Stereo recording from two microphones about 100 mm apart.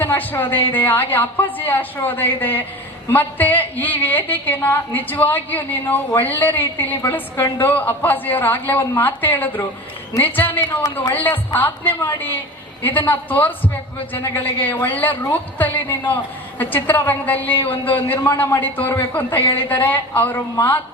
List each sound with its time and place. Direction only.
0.0 s a woman's voice: 20° left (ahead or behind)